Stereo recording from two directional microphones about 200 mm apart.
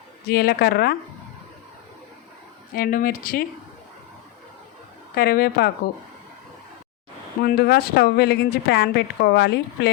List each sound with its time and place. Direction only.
0.3 s a woman's voice: 50° left (ahead or behind)
2.7 s a woman's voice: 45° left (ahead or behind)
5.1 s a woman's voice: 50° left (ahead or behind)
7.4 s speech: 50° left (ahead or behind)